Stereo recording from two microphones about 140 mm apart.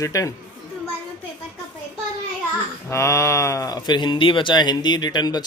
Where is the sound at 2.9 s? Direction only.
20° left (ahead or behind).